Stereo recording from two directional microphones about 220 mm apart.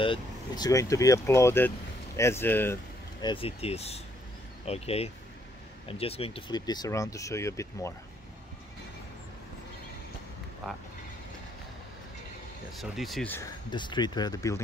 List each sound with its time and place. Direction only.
0.0 s speech: 20° left (ahead or behind)
12.7 s speech: centre (ahead or behind)
13.7 s speech: 20° left (ahead or behind)